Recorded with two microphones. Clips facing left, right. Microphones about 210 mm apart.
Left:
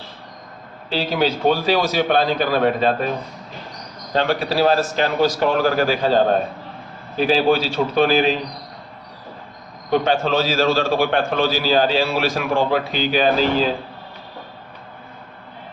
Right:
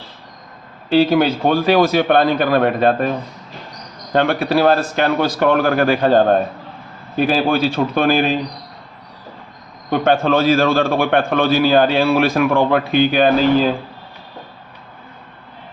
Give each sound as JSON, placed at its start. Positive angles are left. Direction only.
{"t": 0.9, "sound": "a man's voice", "side_deg": -55}
{"t": 4.1, "sound": "a man's voice", "side_deg": -55}
{"t": 10.0, "sound": "a man's voice", "side_deg": -55}